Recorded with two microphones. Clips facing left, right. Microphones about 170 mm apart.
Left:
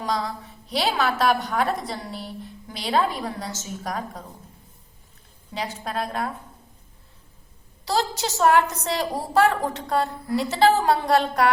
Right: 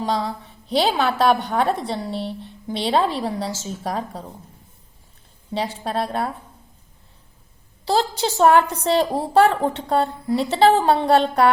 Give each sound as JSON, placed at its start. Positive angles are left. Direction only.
{"t": 0.0, "sound": "a woman's voice", "side_deg": -25}
{"t": 5.5, "sound": "a woman's voice", "side_deg": -30}
{"t": 7.9, "sound": "a woman's voice", "side_deg": -30}